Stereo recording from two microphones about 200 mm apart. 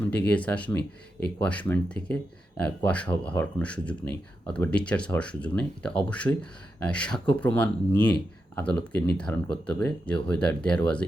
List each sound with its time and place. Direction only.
0.0 s speech: 5° left (ahead or behind)